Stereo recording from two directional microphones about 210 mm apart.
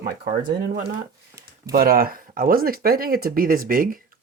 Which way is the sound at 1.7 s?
45° right (ahead or behind).